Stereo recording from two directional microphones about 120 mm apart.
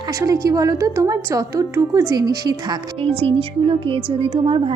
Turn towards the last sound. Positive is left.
turn(degrees=-45)  # may be behind; listen again after turning